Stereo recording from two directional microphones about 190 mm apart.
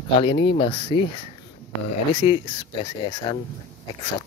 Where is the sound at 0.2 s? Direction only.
25° left (ahead or behind).